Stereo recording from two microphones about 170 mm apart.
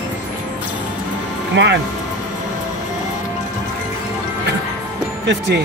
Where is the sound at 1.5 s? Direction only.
90° right.